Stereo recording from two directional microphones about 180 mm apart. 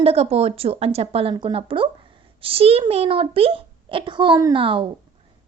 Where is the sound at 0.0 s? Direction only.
35° right (ahead or behind).